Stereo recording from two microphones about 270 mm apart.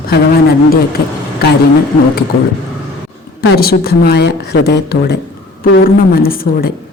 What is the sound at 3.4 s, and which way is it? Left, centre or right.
A woman's voice, left.